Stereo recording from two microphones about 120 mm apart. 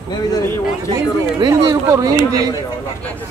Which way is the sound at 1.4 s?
35° right (ahead or behind).